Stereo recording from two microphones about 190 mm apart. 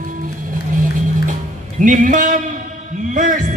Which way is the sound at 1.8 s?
45° right (ahead or behind).